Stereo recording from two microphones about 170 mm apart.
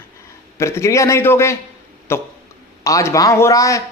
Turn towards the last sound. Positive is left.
turn(degrees=20)  # may be behind; listen again after turning